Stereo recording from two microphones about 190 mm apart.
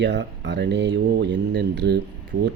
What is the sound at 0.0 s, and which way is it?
Speech, 70° right (ahead or behind).